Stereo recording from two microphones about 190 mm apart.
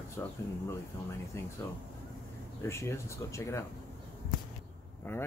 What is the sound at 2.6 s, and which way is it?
Speech, 15° left (ahead or behind).